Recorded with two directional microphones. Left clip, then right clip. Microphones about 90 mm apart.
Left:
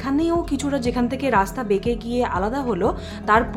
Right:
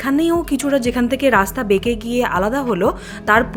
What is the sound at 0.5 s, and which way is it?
A woman's voice, 20° right (ahead or behind).